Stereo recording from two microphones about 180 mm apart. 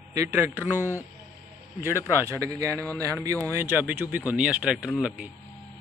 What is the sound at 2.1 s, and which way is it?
Speech, 15° right (ahead or behind).